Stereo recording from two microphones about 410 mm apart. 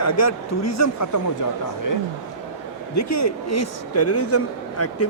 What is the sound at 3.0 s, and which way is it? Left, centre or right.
Speech, left.